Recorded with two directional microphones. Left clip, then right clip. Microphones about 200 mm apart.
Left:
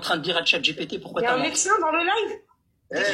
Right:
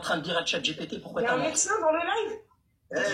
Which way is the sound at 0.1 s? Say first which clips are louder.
Left 6 dB; 25° left (ahead or behind).